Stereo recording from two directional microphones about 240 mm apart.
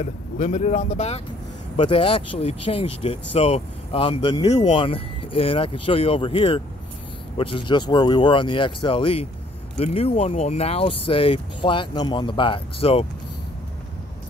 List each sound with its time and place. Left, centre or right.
0.0 s speech: left